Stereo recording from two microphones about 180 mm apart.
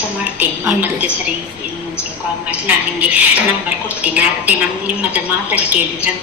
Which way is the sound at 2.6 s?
10° right (ahead or behind).